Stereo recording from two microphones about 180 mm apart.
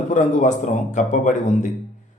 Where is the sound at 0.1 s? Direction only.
45° left (ahead or behind).